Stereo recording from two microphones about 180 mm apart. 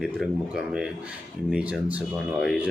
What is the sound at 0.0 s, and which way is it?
Speech, 5° right (ahead or behind).